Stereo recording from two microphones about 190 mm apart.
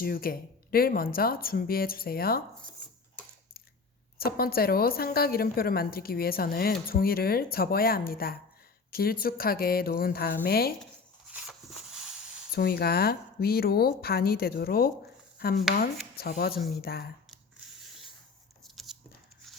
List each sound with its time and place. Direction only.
0.0 s a woman's voice: 50° left (ahead or behind)
4.2 s a woman's voice: 50° left (ahead or behind)
11.3 s a sound: 5° right (ahead or behind)
12.5 s a woman's voice: 55° left (ahead or behind)
16.1 s a woman's voice: 55° left (ahead or behind)
18.6 s a sound: centre (ahead or behind)